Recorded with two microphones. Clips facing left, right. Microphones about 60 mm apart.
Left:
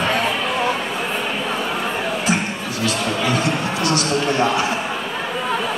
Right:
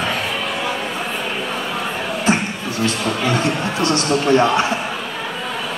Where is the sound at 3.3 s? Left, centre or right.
Right.